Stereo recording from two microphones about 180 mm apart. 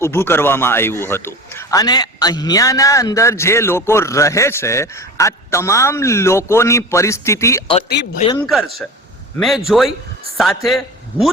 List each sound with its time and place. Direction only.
0.0 s a man's voice: 15° left (ahead or behind)
8.4 s a man's voice: centre (ahead or behind)